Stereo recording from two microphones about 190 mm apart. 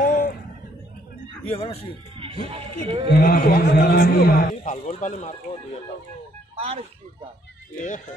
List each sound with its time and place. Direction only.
0.0 s a sound: 45° left (ahead or behind)
1.5 s speech: 30° left (ahead or behind)
2.1 s speech: 30° right (ahead or behind)
3.2 s a man's voice: 50° left (ahead or behind)
6.6 s speech: 30° right (ahead or behind)
7.7 s a man's voice: 45° left (ahead or behind)